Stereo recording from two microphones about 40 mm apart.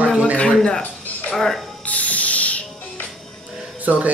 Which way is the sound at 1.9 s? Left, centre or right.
Left.